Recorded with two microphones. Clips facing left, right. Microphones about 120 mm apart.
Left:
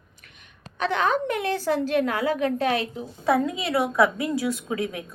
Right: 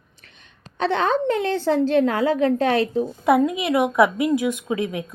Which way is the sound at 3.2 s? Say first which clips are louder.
Right 3 dB; 15° right (ahead or behind).